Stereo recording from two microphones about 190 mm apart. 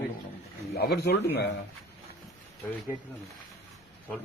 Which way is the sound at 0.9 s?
55° left (ahead or behind).